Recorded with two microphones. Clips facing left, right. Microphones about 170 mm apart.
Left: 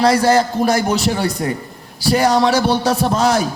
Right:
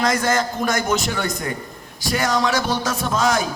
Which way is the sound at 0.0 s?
35° left (ahead or behind).